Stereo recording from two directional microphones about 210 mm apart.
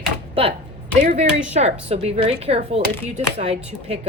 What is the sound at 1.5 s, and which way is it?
Speech, 30° right (ahead or behind).